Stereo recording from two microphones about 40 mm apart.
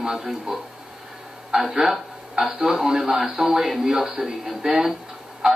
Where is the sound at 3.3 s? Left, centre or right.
Right.